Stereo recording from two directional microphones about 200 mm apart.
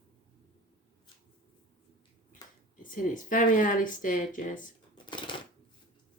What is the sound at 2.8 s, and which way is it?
Speech, 40° left (ahead or behind).